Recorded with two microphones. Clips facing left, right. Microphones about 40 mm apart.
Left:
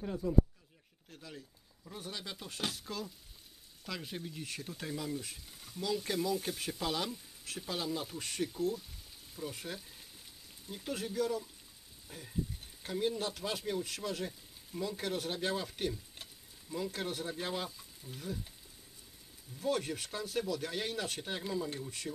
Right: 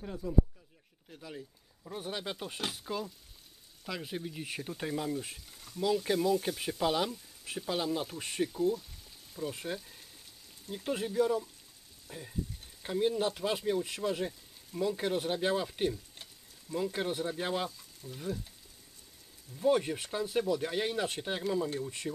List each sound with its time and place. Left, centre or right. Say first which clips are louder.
1.1 s speech: right 3 dB; centre
1.9 s speech: right 6 dB; right
8.5 s stir: right 5 dB; centre
9.5 s speech: right 5 dB; centre
18.0 s stir: right 4 dB; centre
19.5 s speech: right 6 dB; centre